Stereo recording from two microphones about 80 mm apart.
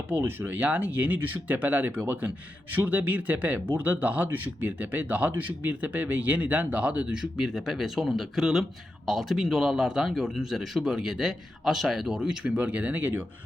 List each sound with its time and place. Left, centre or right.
0.1 s speech: right